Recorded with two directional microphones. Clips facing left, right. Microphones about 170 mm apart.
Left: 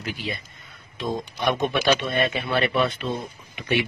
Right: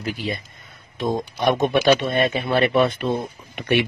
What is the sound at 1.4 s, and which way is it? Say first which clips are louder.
Speech: right 5 dB; 50° right (ahead or behind).